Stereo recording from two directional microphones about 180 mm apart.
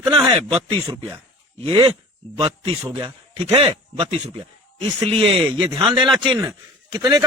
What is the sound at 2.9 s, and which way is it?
Speech, 35° right (ahead or behind).